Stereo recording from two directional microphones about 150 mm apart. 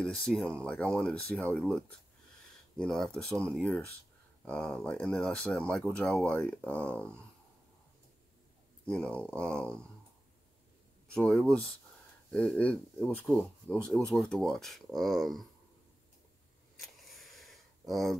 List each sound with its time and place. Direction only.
0.0 s speech: 5° left (ahead or behind)
8.8 s speech: 5° left (ahead or behind)
11.1 s speech: 5° left (ahead or behind)
16.8 s a sound: centre (ahead or behind)